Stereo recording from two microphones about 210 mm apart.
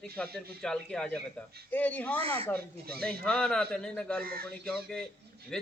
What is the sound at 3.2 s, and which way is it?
A man's voice, 5° left (ahead or behind).